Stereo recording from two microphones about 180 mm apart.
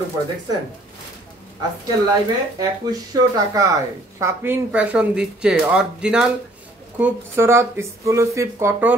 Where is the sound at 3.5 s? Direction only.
20° right (ahead or behind).